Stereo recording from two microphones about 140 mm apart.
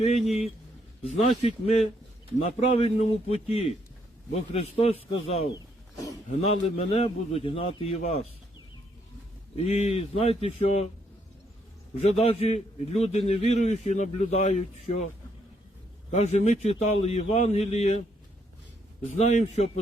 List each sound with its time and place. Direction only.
0.0 s a man's voice: 50° left (ahead or behind)
5.5 s a sound: 25° left (ahead or behind)
6.4 s a man's voice: 50° left (ahead or behind)
9.6 s a man's voice: 50° left (ahead or behind)
11.9 s a man's voice: 50° left (ahead or behind)
16.1 s a man's voice: 50° left (ahead or behind)
19.0 s speech: 55° left (ahead or behind)